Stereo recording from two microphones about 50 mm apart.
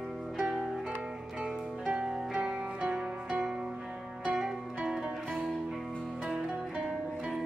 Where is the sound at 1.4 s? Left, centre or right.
Centre.